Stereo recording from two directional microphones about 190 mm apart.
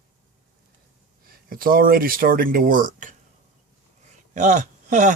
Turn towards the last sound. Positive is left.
turn(degrees=-40)  # may be behind; listen again after turning